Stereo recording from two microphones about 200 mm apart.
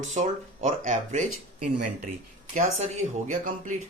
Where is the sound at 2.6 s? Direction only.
35° right (ahead or behind).